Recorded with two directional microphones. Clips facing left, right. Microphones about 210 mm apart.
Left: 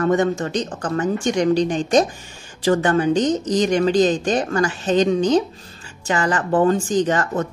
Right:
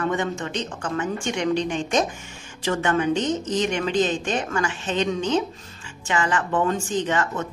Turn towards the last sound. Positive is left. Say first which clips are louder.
# left 5 dB
turn(degrees=40)  # may be behind; listen again after turning